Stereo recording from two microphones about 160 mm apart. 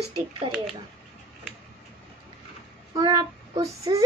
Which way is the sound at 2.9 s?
25° right (ahead or behind).